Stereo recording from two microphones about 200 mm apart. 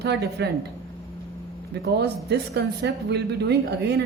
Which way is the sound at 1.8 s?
55° right (ahead or behind).